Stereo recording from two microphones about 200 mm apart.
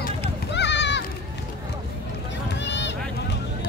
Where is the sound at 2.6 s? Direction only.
60° left (ahead or behind).